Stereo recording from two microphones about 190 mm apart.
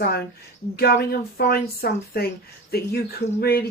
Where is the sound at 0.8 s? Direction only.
55° left (ahead or behind).